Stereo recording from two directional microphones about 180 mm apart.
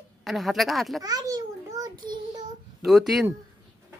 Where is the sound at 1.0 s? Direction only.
20° right (ahead or behind).